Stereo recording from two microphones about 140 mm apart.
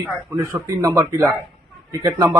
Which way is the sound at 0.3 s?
20° right (ahead or behind).